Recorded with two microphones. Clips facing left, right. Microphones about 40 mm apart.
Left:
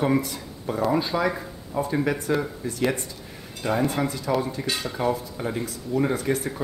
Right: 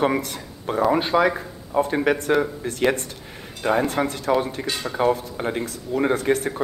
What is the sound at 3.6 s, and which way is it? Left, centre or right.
Speech, right.